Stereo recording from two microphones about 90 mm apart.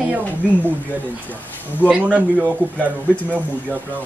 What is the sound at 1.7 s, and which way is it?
Speech, 20° right (ahead or behind).